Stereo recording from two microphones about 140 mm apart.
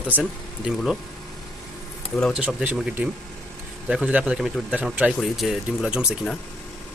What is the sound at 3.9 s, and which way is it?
A man's voice, 10° right (ahead or behind).